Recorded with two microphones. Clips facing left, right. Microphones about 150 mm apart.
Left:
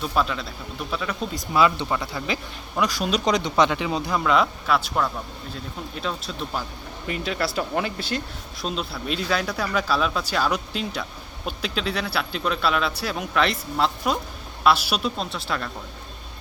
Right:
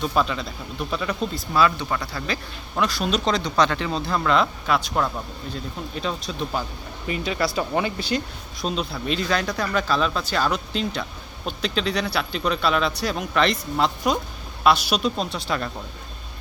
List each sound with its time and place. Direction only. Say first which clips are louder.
0.0 s speech: right 1 dB; centre (ahead or behind)
1.5 s speech: left 1 dB; 20° left (ahead or behind)
2.7 s speech: even; 5° left (ahead or behind)